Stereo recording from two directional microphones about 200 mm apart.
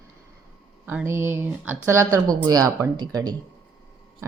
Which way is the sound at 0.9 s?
10° right (ahead or behind).